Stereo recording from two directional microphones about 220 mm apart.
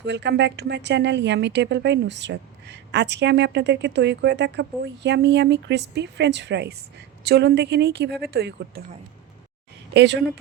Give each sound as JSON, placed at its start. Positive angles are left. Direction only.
{"t": 0.0, "sound": "a woman's voice", "side_deg": -50}
{"t": 9.9, "sound": "speech", "side_deg": -50}